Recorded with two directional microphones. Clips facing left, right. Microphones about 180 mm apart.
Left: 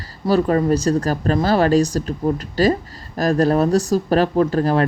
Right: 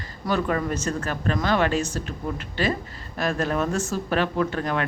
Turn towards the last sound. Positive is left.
turn(degrees=35)  # may be behind; listen again after turning